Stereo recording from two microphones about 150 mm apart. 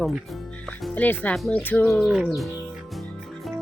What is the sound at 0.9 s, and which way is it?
Speech, 10° left (ahead or behind).